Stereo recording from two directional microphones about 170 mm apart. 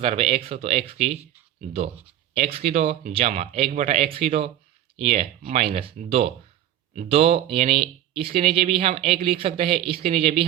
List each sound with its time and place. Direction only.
0.0 s speech: 35° right (ahead or behind)